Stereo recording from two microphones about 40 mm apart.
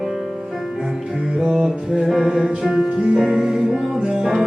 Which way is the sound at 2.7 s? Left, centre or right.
Centre.